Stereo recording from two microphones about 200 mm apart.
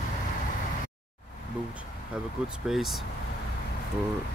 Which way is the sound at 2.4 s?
Centre (ahead or behind).